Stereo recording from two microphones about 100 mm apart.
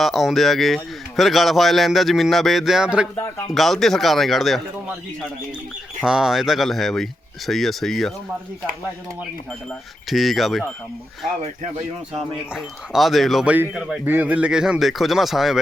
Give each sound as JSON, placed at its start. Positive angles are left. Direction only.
{"t": 0.0, "sound": "a man's voice", "side_deg": 0}
{"t": 3.2, "sound": "speech", "side_deg": 30}
{"t": 3.5, "sound": "a man's voice", "side_deg": 0}
{"t": 6.1, "sound": "a man's voice", "side_deg": -5}
{"t": 10.1, "sound": "a man's voice", "side_deg": 0}
{"t": 12.1, "sound": "a man's voice", "side_deg": -5}
{"t": 13.4, "sound": "a man's voice", "side_deg": -10}